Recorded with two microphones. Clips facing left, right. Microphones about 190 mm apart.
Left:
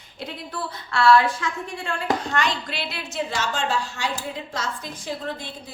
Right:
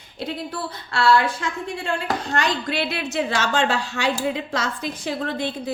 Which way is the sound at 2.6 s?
55° right (ahead or behind).